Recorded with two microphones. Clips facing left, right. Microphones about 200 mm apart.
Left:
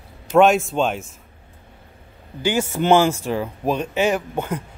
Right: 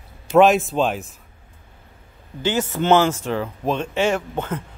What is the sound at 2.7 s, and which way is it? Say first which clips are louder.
A woman's voice: left 1 dB; 15° left (ahead or behind).